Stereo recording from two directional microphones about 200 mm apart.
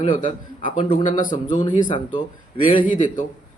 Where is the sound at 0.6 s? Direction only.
40° left (ahead or behind).